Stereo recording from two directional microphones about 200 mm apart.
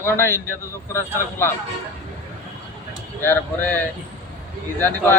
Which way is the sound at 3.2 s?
10° left (ahead or behind).